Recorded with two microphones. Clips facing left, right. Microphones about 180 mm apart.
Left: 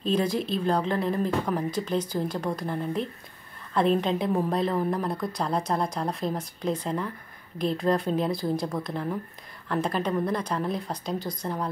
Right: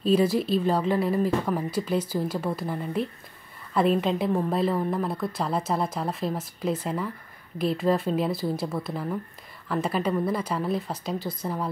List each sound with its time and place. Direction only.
0.0 s a woman's voice: 5° right (ahead or behind)